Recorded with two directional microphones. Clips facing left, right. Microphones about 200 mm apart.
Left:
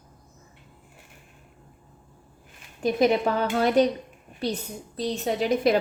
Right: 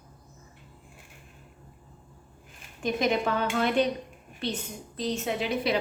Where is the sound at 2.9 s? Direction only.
35° left (ahead or behind).